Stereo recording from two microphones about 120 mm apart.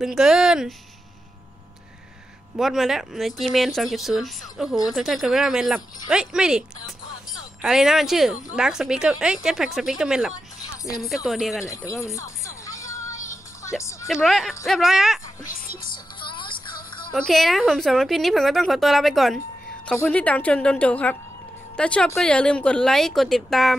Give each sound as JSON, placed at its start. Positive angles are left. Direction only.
{"t": 0.0, "sound": "speech", "side_deg": -5}
{"t": 2.5, "sound": "speech", "side_deg": 0}
{"t": 7.6, "sound": "speech", "side_deg": -5}
{"t": 11.9, "sound": "music", "side_deg": 25}
{"t": 14.0, "sound": "speech", "side_deg": 0}
{"t": 16.2, "sound": "music", "side_deg": 40}
{"t": 17.1, "sound": "a woman's voice", "side_deg": 0}